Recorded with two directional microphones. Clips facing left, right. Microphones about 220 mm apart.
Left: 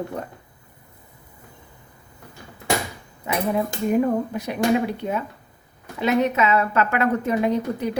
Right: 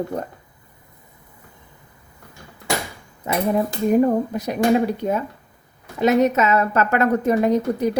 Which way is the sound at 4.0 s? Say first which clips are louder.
Right 3 dB; 40° right (ahead or behind).